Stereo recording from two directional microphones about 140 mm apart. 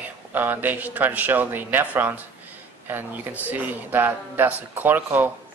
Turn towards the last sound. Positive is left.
turn(degrees=-15)  # may be behind; listen again after turning